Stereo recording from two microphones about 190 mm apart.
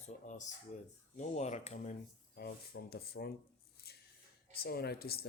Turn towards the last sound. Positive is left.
turn(degrees=55)  # may be behind; listen again after turning